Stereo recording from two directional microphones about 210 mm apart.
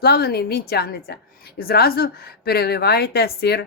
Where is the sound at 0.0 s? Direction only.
50° left (ahead or behind).